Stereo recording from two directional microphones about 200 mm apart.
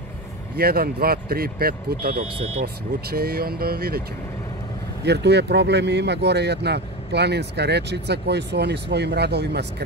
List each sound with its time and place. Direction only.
0.6 s speech: 50° right (ahead or behind)
5.0 s speech: 60° right (ahead or behind)